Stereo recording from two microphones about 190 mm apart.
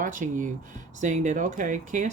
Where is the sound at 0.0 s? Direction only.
45° right (ahead or behind).